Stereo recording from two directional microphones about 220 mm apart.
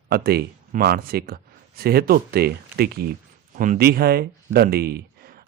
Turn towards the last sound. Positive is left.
turn(degrees=-45)  # may be behind; listen again after turning